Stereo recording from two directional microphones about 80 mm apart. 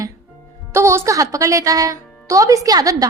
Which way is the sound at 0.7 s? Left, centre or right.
Right.